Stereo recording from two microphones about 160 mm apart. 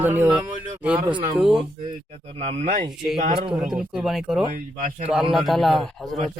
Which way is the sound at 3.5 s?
5° right (ahead or behind).